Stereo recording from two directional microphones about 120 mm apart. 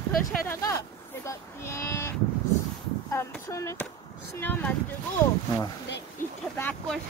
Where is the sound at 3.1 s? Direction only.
25° left (ahead or behind).